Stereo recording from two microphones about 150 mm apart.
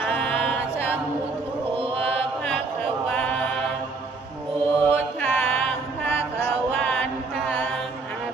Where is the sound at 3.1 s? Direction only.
10° left (ahead or behind).